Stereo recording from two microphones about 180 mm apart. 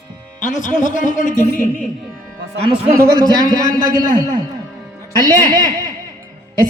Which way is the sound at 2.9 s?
20° right (ahead or behind).